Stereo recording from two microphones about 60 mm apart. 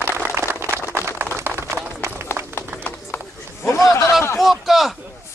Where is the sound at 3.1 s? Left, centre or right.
Left.